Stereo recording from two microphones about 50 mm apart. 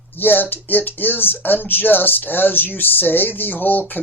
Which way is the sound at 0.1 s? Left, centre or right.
Left.